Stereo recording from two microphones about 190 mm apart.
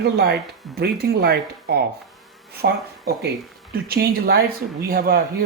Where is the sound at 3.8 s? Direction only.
55° right (ahead or behind).